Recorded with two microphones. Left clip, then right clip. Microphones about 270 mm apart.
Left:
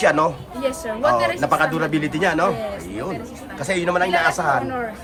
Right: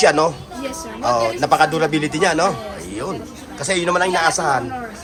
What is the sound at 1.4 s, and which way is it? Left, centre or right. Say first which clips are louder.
Speech: right 4 dB; centre.